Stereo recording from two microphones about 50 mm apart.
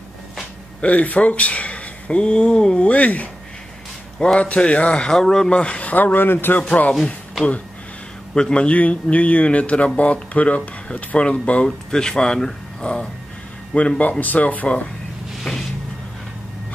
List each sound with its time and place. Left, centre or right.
0.7 s speech: left
4.4 s speech: left
5.1 s speech: centre
5.5 s speech: left
5.9 s speech: left
8.4 s speech: centre
11.9 s speech: centre
13.7 s speech: left